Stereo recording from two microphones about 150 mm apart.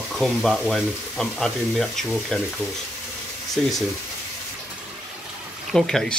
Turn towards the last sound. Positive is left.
turn(degrees=5)  # may be behind; listen again after turning